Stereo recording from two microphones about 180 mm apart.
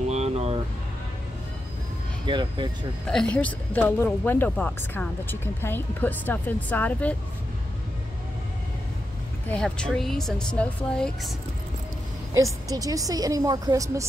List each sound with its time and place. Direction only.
0.1 s air conditioning: 35° right (ahead or behind)
2.2 s a woman's voice: 25° right (ahead or behind)
3.1 s speech: 5° left (ahead or behind)
9.5 s speech: 5° left (ahead or behind)
12.6 s a woman's voice: 20° right (ahead or behind)